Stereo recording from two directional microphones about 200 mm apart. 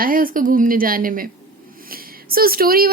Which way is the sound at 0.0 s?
45° right (ahead or behind).